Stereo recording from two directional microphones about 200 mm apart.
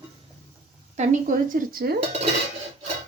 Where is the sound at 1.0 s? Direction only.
40° right (ahead or behind).